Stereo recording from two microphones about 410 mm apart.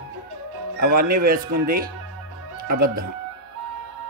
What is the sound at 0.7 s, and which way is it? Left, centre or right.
Speech, right.